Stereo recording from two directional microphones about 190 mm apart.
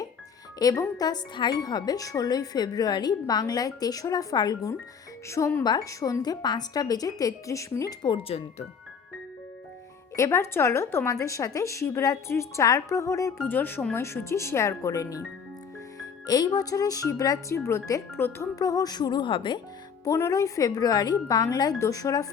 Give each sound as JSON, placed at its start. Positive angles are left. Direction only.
{"t": 0.6, "sound": "speech", "side_deg": 20}
{"t": 10.2, "sound": "a woman's voice", "side_deg": 15}
{"t": 16.2, "sound": "speech", "side_deg": 20}